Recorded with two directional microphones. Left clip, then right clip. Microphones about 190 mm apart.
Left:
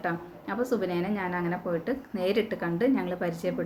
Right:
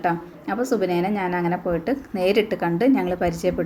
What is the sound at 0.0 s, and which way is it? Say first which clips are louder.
A woman's voice: right 8 dB; 10° right (ahead or behind).